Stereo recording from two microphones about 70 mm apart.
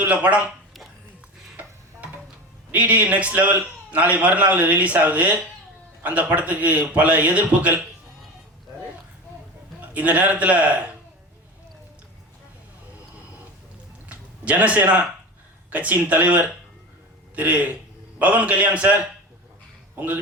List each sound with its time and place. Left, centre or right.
0.0 s a man's voice: right
2.7 s a man's voice: right
9.9 s a man's voice: right
14.1 s a sound: right
15.7 s a man's voice: right